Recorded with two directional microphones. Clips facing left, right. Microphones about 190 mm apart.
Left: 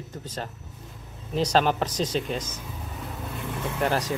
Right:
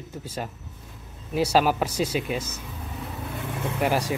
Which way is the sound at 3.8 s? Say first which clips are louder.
Right 1 dB; 10° right (ahead or behind).